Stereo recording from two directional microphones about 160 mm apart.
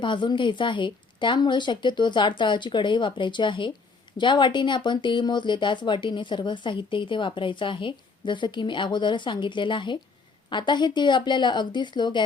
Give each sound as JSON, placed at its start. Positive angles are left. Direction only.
{"t": 0.0, "sound": "speech", "side_deg": 30}